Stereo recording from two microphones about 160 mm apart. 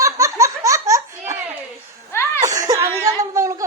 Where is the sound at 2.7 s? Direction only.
20° right (ahead or behind).